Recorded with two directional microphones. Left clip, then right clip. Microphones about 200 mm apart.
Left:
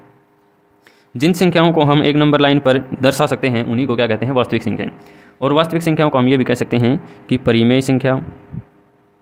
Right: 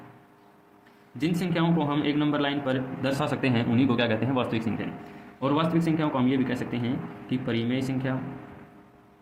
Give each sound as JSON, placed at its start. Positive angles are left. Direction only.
{"t": 1.2, "sound": "a man's voice", "side_deg": 60}
{"t": 5.4, "sound": "a man's voice", "side_deg": 60}